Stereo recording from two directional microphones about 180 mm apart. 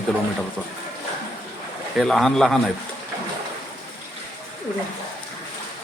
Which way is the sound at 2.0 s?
Centre (ahead or behind).